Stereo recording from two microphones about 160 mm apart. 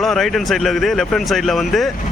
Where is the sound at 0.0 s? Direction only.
Centre (ahead or behind).